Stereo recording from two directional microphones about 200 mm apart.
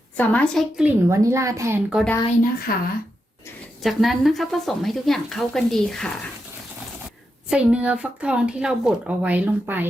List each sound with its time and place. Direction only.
0.2 s speech: 5° left (ahead or behind)
1.1 s speech: 15° right (ahead or behind)
2.7 s speech: 45° left (ahead or behind)
3.8 s speech: centre (ahead or behind)
7.5 s speech: 5° right (ahead or behind)